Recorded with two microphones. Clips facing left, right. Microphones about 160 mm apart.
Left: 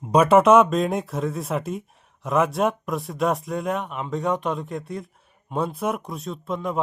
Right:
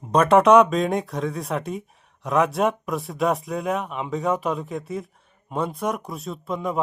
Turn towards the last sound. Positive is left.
turn(degrees=0)  # may be behind; listen again after turning